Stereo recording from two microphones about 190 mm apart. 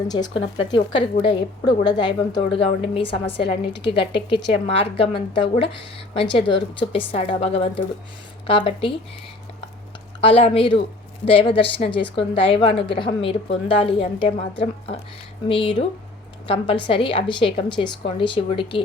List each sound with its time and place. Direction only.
0.1 s a woman's voice: 25° left (ahead or behind)
10.2 s a woman's voice: 30° left (ahead or behind)